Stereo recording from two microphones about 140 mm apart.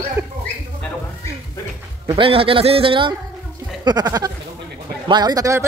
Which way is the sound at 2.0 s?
40° right (ahead or behind).